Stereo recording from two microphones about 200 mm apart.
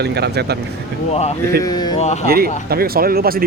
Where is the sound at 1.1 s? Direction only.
30° left (ahead or behind).